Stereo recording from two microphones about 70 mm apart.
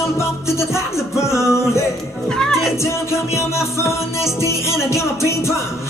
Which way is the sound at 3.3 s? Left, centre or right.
Left.